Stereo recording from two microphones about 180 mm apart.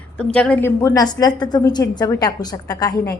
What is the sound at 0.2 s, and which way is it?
A woman's voice, 5° left (ahead or behind).